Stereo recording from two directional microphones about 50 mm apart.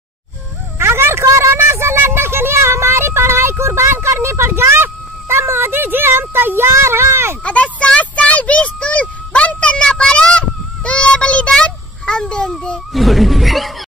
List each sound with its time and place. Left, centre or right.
0.7 s a sound: right
3.9 s speech: right
7.4 s a child's voice: left
12.9 s speech: centre